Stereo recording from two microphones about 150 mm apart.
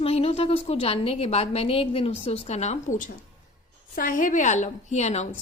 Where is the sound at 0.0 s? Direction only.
40° left (ahead or behind).